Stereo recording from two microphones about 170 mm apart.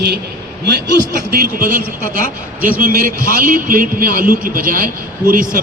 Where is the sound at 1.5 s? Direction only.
50° right (ahead or behind).